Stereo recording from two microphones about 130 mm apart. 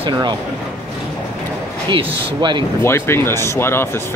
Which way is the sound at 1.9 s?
35° right (ahead or behind).